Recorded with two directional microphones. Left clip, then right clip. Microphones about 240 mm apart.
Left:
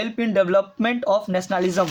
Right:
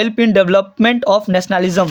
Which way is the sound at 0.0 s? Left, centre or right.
Right.